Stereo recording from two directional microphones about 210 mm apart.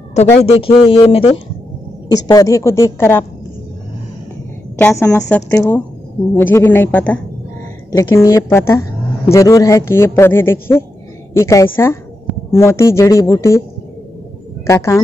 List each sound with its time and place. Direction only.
0.4 s a man's voice: 30° left (ahead or behind); by 3.3 s 10° left (ahead or behind)
4.7 s a man's voice: 10° left (ahead or behind)
14.7 s a man's voice: 15° left (ahead or behind)